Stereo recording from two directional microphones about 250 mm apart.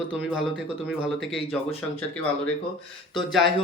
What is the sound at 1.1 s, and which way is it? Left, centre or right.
Speech, centre.